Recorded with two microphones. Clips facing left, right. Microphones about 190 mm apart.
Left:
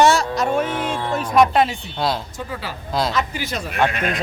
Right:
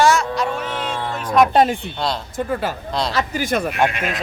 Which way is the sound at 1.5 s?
50° right (ahead or behind).